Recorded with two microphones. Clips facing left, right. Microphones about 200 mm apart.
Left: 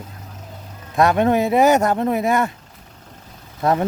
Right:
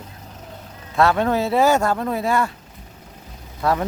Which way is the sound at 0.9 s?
20° left (ahead or behind).